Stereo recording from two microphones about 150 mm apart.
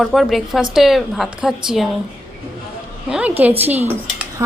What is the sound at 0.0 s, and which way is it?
A woman's voice, centre (ahead or behind).